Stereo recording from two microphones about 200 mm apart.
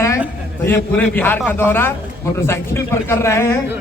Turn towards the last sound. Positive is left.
turn(degrees=15)  # may be behind; listen again after turning